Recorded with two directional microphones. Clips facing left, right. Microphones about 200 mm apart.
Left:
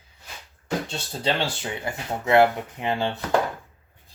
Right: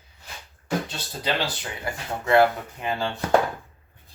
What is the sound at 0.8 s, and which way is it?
Speech, 25° left (ahead or behind).